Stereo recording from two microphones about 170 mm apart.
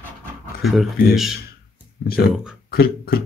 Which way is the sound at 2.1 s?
60° left (ahead or behind).